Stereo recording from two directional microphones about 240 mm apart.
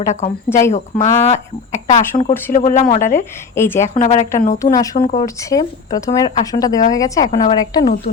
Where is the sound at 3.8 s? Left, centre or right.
Left.